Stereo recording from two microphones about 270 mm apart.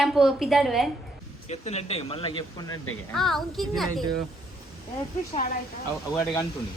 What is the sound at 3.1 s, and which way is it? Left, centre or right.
Speech, centre.